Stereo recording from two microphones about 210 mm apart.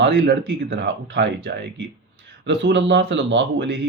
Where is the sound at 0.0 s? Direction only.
55° right (ahead or behind).